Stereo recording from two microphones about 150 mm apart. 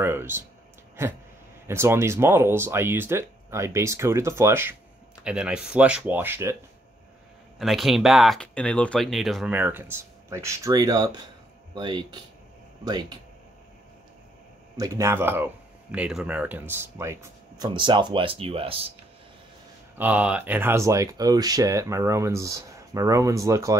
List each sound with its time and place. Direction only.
0.0 s speech: 15° right (ahead or behind)
1.7 s speech: 15° right (ahead or behind)
5.2 s speech: 5° right (ahead or behind)
7.5 s speech: centre (ahead or behind)
9.5 s speech: 10° right (ahead or behind); by 13.2 s 25° right (ahead or behind)
14.8 s speech: 20° right (ahead or behind)
17.7 s speech: 30° right (ahead or behind)
20.0 s speech: 10° right (ahead or behind)